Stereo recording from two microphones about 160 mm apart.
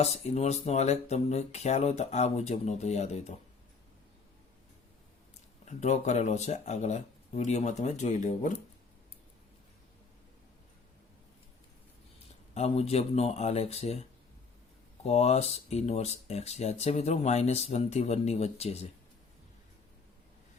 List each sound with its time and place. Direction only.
0.0 s speech: 40° left (ahead or behind)
5.6 s speech: 45° left (ahead or behind)
12.5 s speech: 40° left (ahead or behind)